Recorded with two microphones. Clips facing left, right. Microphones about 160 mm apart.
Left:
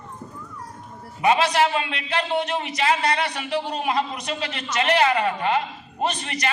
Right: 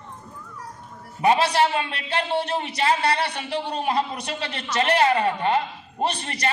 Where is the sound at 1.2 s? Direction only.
35° right (ahead or behind).